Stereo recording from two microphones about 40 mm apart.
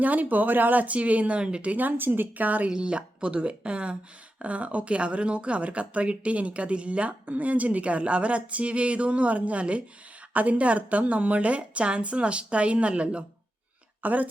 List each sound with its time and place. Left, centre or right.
0.0 s speech: right
1.4 s speech: right
1.7 s a woman's voice: right
2.4 s speech: right
2.6 s speech: right
14.0 s a woman's voice: right